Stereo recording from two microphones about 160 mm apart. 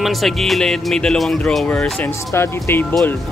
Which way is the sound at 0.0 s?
Centre (ahead or behind).